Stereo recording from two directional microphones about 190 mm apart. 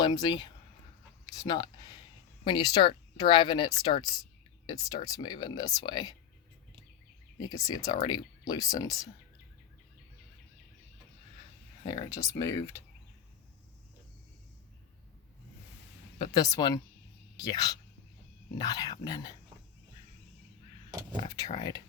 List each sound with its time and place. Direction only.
0.0 s speech: 20° left (ahead or behind)
1.5 s speech: 20° left (ahead or behind)
7.3 s speech: 20° left (ahead or behind)
11.9 s speech: 20° left (ahead or behind)
16.1 s speech: 20° left (ahead or behind)